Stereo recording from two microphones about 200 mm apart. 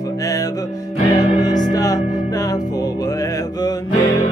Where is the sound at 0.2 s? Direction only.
15° left (ahead or behind).